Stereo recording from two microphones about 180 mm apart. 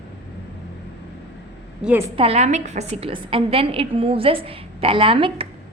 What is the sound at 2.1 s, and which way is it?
A woman's voice, 35° right (ahead or behind).